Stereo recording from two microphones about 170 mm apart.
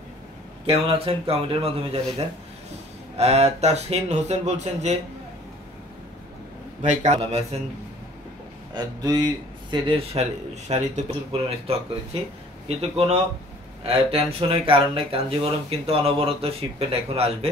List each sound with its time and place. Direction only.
0.7 s speech: 35° right (ahead or behind)
6.8 s speech: 40° right (ahead or behind)
8.7 s speech: 25° right (ahead or behind)